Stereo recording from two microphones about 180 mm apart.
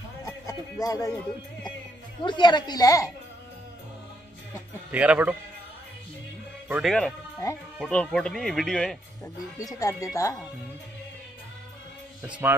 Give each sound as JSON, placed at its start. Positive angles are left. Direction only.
{"t": 0.2, "sound": "a sound", "side_deg": 20}
{"t": 2.2, "sound": "a woman's voice", "side_deg": 25}
{"t": 4.9, "sound": "speech", "side_deg": -5}
{"t": 6.7, "sound": "speech", "side_deg": 0}
{"t": 9.6, "sound": "speech", "side_deg": 20}
{"t": 12.2, "sound": "speech", "side_deg": -10}